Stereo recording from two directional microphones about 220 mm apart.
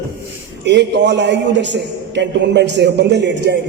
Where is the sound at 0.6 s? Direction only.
50° right (ahead or behind).